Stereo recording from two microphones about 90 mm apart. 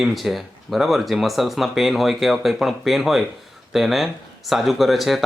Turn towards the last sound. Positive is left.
turn(degrees=0)  # may be behind; listen again after turning